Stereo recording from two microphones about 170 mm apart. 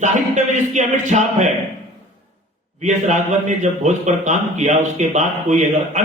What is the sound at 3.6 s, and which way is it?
Speech, 45° right (ahead or behind).